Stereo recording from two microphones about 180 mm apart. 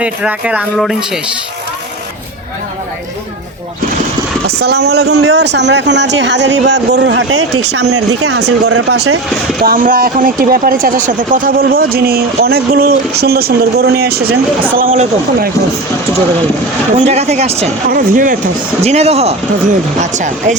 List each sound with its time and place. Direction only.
0.0 s speech: 5° right (ahead or behind)
4.4 s speech: 65° right (ahead or behind)
9.6 s speech: 50° right (ahead or behind)
17.1 s speech: 35° right (ahead or behind)
17.8 s speech: 50° right (ahead or behind)
18.8 s speech: 35° right (ahead or behind)